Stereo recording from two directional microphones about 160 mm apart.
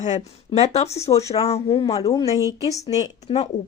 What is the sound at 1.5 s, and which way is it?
Speech, 40° left (ahead or behind).